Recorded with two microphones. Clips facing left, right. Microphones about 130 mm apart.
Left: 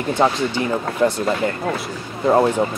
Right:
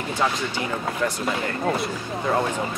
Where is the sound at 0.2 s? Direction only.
30° left (ahead or behind).